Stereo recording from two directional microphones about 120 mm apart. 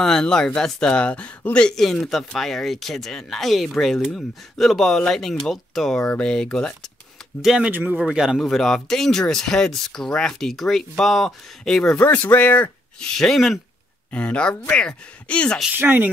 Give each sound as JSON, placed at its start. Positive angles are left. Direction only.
{"t": 0.0, "sound": "speech", "side_deg": 5}
{"t": 7.4, "sound": "speech", "side_deg": -5}
{"t": 15.8, "sound": "speech", "side_deg": -15}